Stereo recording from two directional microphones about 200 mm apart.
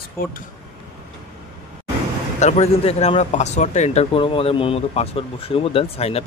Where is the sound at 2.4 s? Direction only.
30° left (ahead or behind).